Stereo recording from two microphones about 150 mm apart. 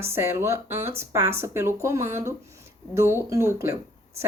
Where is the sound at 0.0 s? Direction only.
15° right (ahead or behind).